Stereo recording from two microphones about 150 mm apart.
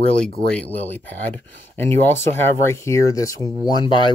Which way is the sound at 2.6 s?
20° left (ahead or behind).